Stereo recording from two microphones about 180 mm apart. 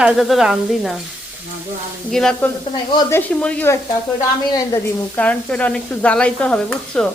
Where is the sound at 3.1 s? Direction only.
10° left (ahead or behind).